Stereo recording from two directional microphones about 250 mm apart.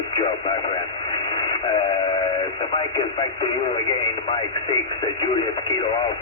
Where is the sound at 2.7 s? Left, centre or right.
Left.